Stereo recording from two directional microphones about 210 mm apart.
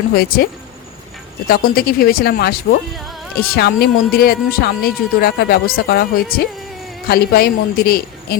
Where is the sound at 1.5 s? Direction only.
45° left (ahead or behind).